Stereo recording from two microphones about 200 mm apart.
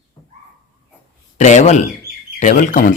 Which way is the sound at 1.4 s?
35° left (ahead or behind).